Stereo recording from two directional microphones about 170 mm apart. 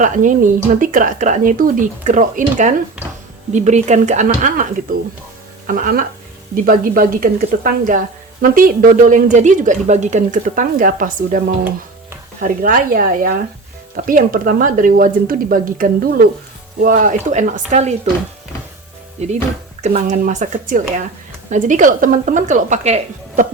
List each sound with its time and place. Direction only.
0.0 s a woman's voice: 50° right (ahead or behind)
5.6 s a woman's voice: 55° right (ahead or behind)
19.8 s a woman's voice: 40° right (ahead or behind)